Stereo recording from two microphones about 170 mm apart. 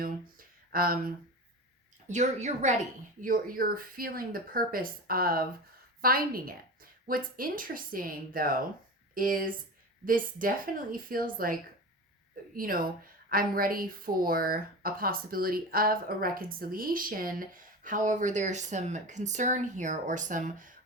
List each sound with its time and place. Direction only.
0.0 s a sound: 60° right (ahead or behind)
2.0 s speech: 45° right (ahead or behind)
12.5 s speech: 55° right (ahead or behind)